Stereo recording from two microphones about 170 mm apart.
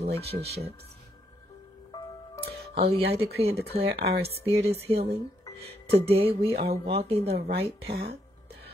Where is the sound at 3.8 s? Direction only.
70° right (ahead or behind).